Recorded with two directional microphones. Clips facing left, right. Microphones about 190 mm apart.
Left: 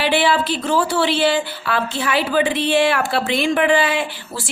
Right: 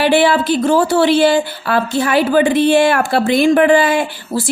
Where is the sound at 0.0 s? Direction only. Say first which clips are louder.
Right 5 dB; 45° right (ahead or behind).